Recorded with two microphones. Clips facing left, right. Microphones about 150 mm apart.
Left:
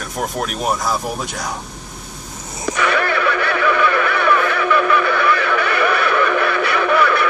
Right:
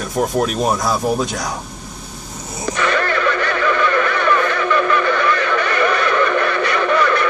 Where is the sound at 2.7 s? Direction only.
10° left (ahead or behind).